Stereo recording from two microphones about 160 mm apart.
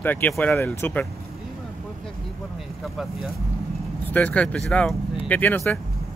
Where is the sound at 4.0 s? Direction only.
10° left (ahead or behind).